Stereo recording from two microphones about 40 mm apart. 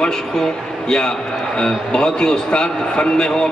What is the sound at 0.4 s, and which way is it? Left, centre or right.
A man's voice, centre.